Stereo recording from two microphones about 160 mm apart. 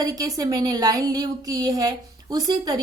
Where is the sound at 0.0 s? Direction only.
20° right (ahead or behind).